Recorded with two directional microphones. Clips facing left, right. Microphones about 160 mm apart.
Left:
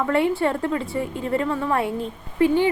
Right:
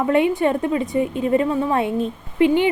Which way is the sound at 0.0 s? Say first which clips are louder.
Right 3 dB; 20° right (ahead or behind).